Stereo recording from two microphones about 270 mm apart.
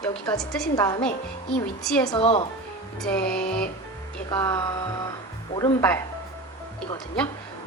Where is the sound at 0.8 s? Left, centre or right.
Centre.